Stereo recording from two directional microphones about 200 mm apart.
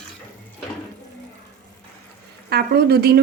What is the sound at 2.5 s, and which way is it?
Speech, 50° right (ahead or behind).